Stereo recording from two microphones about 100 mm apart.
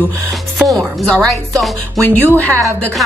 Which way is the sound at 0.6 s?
Centre (ahead or behind).